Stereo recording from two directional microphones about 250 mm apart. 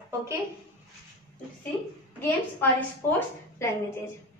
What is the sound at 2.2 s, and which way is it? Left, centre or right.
A woman's voice, centre.